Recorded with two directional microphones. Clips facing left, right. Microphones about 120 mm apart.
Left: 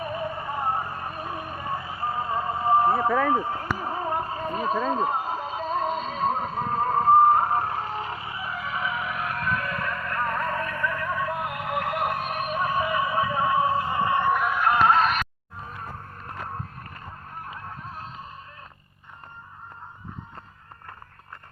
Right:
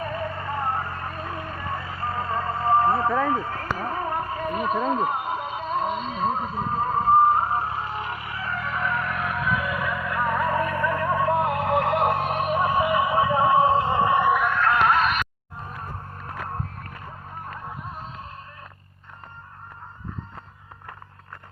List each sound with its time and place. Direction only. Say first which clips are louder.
0.0 s vehicle: right 1 dB; 20° left (ahead or behind)
3.2 s a sound: left 1 dB; 20° left (ahead or behind); by 6.2 s 40° left (ahead or behind)
6.3 s vehicle: even; 50° left (ahead or behind); by 8.4 s 25° left (ahead or behind)
8.4 s music: right 3 dB; 5° left (ahead or behind); by 14.3 s 20° right (ahead or behind)
14.3 s music: right 2 dB; centre (ahead or behind)
14.6 s music: left 3 dB; 15° left (ahead or behind)
14.8 s music: even; 35° left (ahead or behind)
15.7 s a sound: right 2 dB; centre (ahead or behind)
17.7 s music: right 2 dB; centre (ahead or behind)